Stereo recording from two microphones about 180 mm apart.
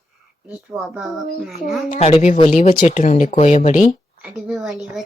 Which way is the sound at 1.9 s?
40° left (ahead or behind).